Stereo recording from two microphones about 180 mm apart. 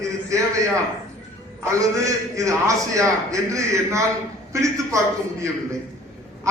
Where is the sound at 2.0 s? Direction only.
15° right (ahead or behind).